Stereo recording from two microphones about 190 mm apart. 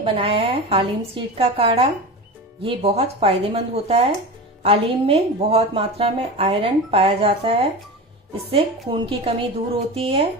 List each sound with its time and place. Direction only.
0.0 s a woman's voice: 30° right (ahead or behind)